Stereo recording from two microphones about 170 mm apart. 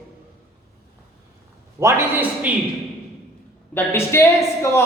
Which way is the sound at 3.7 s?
15° left (ahead or behind).